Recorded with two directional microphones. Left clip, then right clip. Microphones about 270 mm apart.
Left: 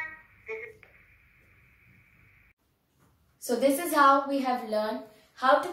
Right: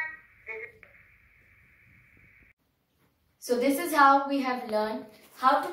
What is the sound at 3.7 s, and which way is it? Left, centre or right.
Speech, centre.